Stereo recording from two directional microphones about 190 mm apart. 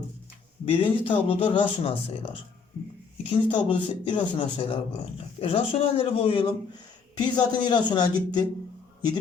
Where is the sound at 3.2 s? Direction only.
25° left (ahead or behind).